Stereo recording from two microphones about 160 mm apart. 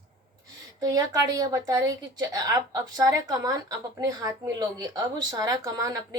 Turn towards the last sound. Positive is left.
turn(degrees=-20)  # may be behind; listen again after turning